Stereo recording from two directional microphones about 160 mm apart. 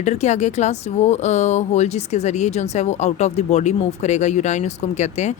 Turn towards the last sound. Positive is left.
turn(degrees=45)  # may be behind; listen again after turning